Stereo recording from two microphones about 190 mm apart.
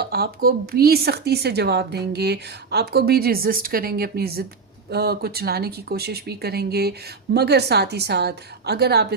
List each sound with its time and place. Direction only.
0.0 s a woman's voice: 55° right (ahead or behind)